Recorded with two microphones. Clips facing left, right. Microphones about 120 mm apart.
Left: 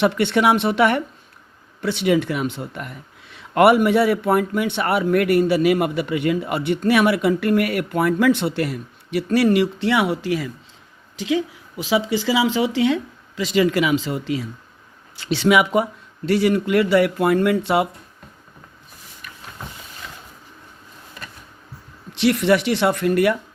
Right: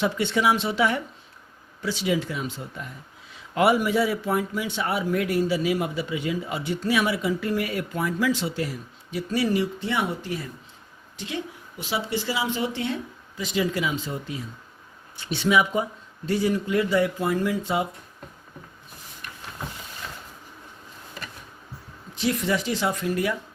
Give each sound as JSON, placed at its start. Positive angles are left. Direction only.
{"t": 0.0, "sound": "a woman's voice", "side_deg": 70}
{"t": 22.1, "sound": "speech", "side_deg": 70}